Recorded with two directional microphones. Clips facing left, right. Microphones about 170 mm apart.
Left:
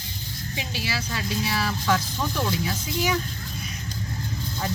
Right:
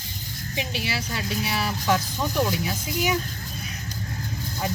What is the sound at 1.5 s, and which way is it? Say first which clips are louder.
Speech: right 1 dB; 20° right (ahead or behind).